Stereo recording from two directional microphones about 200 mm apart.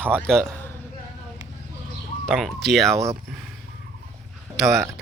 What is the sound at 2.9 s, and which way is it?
Speech, 15° right (ahead or behind).